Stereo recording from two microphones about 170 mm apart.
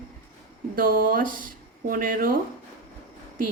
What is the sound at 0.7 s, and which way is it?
A woman's voice, 55° right (ahead or behind).